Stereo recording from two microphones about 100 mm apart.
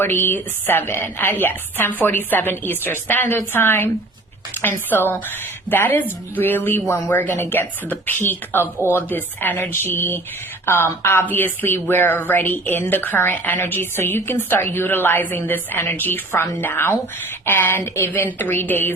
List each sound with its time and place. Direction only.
0.0 s speech: 20° left (ahead or behind)